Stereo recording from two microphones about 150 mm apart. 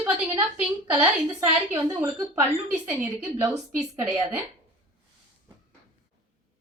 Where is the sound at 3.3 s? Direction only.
20° right (ahead or behind).